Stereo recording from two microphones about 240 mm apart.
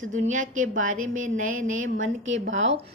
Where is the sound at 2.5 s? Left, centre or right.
Right.